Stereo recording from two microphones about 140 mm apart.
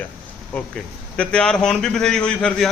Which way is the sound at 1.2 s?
5° left (ahead or behind).